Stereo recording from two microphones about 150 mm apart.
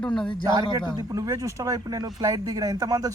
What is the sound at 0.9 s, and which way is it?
Speech, 25° right (ahead or behind).